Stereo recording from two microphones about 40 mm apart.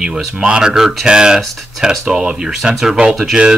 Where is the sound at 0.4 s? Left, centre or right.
Right.